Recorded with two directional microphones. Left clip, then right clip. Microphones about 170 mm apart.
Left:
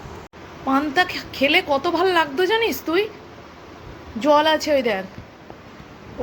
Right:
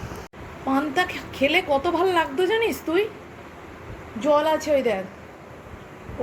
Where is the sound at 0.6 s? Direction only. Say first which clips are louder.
Left 4 dB; 5° left (ahead or behind).